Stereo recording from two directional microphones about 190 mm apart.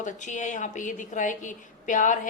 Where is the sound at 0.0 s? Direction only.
40° left (ahead or behind).